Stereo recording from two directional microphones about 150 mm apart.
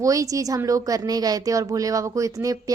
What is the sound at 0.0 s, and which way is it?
Speech, 20° right (ahead or behind).